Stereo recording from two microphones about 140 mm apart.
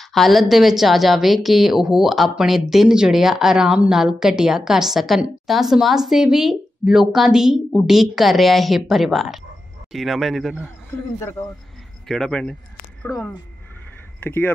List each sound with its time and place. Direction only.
0.0 s a woman's voice: centre (ahead or behind)
11.1 s speech: 15° left (ahead or behind)
12.1 s a woman's voice: 5° left (ahead or behind)
14.2 s speech: 15° left (ahead or behind)